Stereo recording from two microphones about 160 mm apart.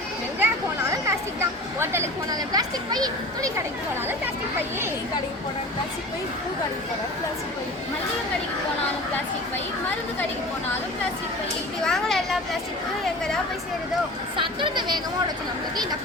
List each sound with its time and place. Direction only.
0.3 s a sound: 15° right (ahead or behind)
11.8 s speech: 5° left (ahead or behind)
14.3 s speech: 30° right (ahead or behind)